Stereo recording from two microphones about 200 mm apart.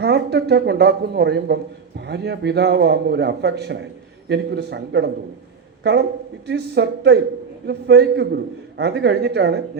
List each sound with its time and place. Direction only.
0.0 s a man's voice: 55° right (ahead or behind)